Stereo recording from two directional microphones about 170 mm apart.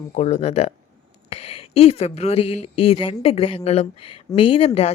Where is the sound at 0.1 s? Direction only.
40° left (ahead or behind).